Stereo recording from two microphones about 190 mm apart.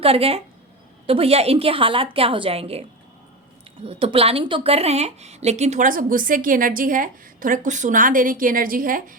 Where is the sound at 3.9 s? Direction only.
30° right (ahead or behind).